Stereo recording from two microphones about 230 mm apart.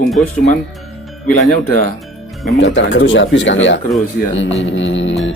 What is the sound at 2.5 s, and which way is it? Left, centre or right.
Speech, left.